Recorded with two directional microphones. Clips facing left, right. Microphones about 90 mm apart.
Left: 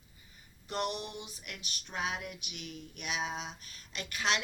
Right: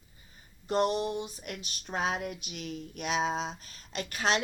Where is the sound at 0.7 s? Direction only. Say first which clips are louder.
Right 8 dB; 35° right (ahead or behind).